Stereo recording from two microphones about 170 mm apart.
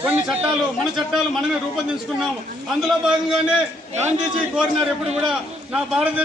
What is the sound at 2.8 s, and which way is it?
Speech, centre (ahead or behind).